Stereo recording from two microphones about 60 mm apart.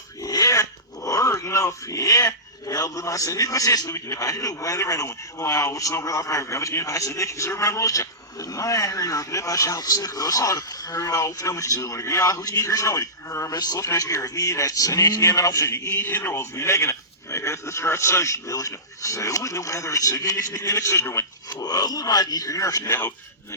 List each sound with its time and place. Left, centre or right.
0.2 s a man's voice: left
16.3 s a man's voice: left
21.6 s speech: left